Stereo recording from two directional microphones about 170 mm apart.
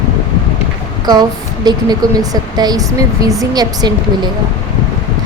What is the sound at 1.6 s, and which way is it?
Speech, 25° right (ahead or behind).